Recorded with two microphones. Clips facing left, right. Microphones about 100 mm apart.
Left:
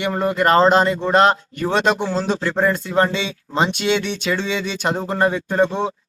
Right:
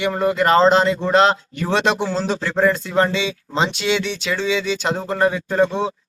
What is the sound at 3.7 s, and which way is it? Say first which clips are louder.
Speech: left 1 dB; 50° left (ahead or behind).